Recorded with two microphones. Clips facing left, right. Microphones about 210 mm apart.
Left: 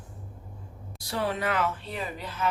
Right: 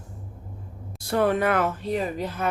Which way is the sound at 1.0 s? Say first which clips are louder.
Right 8 dB; 55° right (ahead or behind).